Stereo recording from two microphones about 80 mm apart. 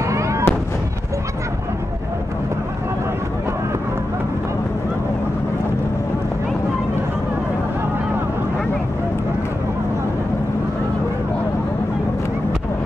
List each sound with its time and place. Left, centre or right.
0.1 s fireworks: right